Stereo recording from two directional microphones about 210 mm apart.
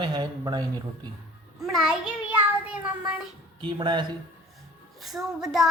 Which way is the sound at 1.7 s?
5° right (ahead or behind).